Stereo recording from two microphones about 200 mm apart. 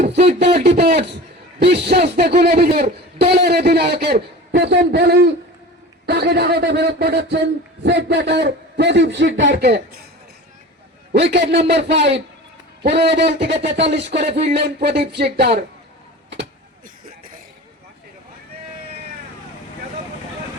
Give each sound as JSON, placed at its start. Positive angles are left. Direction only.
{"t": 0.3, "sound": "a man's voice", "side_deg": -55}
{"t": 11.1, "sound": "a man's voice", "side_deg": -60}